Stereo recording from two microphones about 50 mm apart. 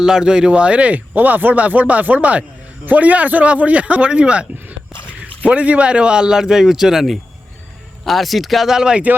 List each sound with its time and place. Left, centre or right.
0.0 s speech: centre